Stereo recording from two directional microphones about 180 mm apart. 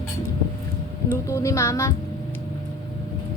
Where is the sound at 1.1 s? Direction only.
15° left (ahead or behind).